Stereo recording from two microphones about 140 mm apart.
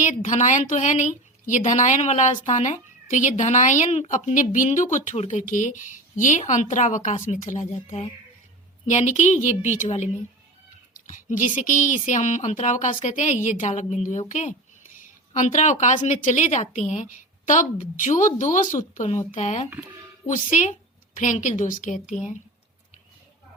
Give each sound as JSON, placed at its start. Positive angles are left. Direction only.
{"t": 0.0, "sound": "a woman's voice", "side_deg": 60}